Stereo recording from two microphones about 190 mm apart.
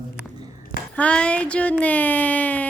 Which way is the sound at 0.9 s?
5° left (ahead or behind).